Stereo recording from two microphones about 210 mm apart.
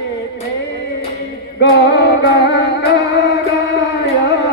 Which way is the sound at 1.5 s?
55° left (ahead or behind).